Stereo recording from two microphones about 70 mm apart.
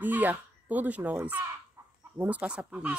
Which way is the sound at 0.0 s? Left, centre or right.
Right.